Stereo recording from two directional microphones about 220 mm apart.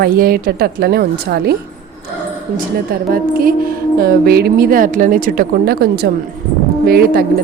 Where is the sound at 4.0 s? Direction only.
45° right (ahead or behind).